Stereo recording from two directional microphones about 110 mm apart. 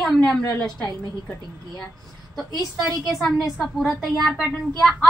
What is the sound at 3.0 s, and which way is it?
A woman's voice, centre (ahead or behind).